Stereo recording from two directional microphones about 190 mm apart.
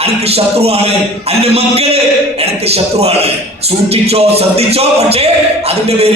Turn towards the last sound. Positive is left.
turn(degrees=-30)  # may be behind; listen again after turning